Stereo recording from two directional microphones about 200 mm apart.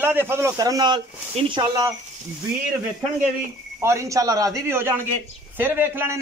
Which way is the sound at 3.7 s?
15° right (ahead or behind).